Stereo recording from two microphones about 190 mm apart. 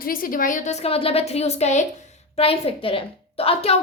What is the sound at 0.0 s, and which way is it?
A woman's voice, 50° left (ahead or behind).